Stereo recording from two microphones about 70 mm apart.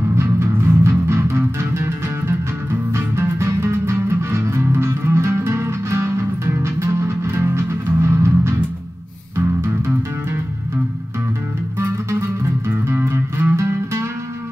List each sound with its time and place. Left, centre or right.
0.1 s music: right
11.8 s music: right